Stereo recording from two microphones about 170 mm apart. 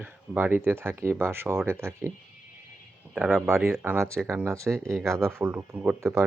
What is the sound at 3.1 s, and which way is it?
Speech, 10° right (ahead or behind).